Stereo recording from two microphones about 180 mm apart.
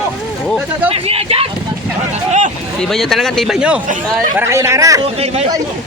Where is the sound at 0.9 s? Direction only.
30° right (ahead or behind).